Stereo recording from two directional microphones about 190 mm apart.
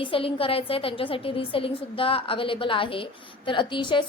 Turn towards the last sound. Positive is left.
turn(degrees=25)  # may be behind; listen again after turning